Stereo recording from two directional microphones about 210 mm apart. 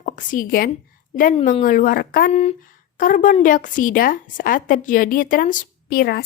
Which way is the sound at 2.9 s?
40° left (ahead or behind).